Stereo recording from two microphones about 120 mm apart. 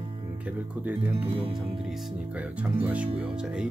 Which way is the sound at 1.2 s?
45° right (ahead or behind).